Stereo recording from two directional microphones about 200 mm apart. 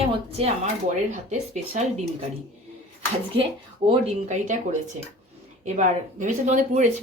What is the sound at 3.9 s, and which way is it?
Speech, 35° right (ahead or behind).